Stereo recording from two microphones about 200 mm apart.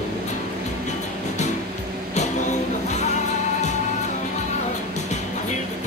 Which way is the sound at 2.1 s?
35° left (ahead or behind).